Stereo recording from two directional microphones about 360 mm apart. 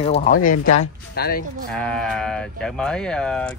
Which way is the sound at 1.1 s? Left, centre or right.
Left.